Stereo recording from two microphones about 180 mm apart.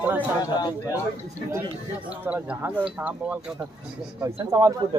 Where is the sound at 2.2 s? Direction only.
10° right (ahead or behind).